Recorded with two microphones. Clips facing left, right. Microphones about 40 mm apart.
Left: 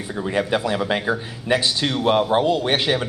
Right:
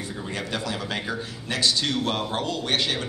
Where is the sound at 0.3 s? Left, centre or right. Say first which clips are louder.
Left 10 dB; left.